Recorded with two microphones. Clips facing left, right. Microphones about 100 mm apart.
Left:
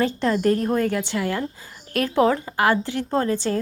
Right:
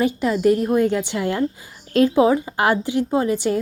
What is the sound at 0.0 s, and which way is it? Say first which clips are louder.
A woman's voice: right 2 dB; 10° right (ahead or behind).